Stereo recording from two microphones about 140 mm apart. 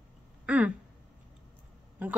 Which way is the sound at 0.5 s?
10° right (ahead or behind).